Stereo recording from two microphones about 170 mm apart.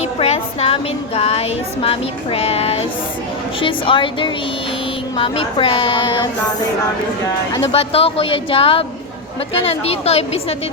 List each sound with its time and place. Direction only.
0.2 s speech: 35° left (ahead or behind)
7.7 s speech: 35° left (ahead or behind)